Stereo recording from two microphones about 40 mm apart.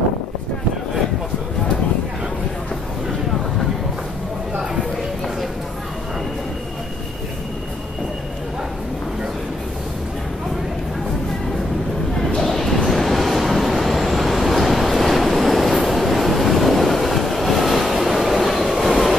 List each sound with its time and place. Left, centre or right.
12.4 s train: centre